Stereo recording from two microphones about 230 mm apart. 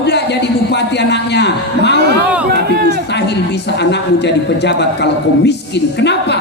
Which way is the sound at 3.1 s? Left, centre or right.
Left.